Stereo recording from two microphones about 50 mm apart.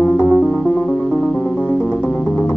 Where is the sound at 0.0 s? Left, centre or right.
Left.